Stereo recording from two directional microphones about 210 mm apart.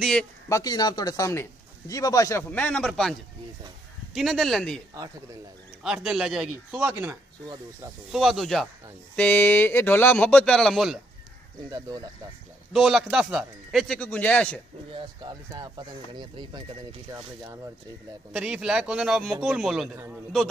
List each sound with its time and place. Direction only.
0.0 s speech: 5° left (ahead or behind)
0.5 s speech: 15° left (ahead or behind)
5.9 s speech: 5° right (ahead or behind)
8.1 s speech: centre (ahead or behind)
12.7 s speech: centre (ahead or behind)
15.0 s speech: 20° right (ahead or behind)
18.3 s speech: 5° right (ahead or behind)